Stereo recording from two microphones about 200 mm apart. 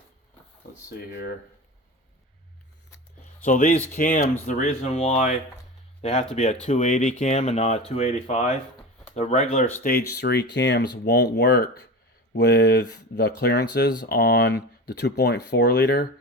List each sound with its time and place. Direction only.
0.9 s speech: 50° left (ahead or behind)
3.4 s speech: 40° left (ahead or behind)
9.8 s speech: 50° left (ahead or behind)